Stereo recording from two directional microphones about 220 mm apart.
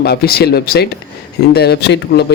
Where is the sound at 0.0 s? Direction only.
45° left (ahead or behind).